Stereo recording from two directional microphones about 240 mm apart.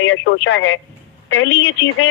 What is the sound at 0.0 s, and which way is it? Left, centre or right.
Speech, left.